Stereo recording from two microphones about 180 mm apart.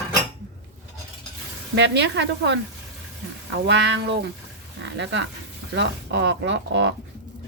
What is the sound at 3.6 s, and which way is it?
Speech, 80° right.